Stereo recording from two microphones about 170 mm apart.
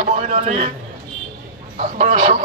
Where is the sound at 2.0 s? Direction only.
45° right (ahead or behind).